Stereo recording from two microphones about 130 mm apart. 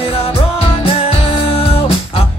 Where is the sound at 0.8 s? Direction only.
45° left (ahead or behind).